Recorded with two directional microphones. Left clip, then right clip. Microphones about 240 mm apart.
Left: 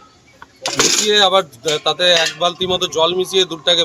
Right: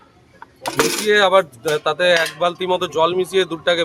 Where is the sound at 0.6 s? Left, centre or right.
Centre.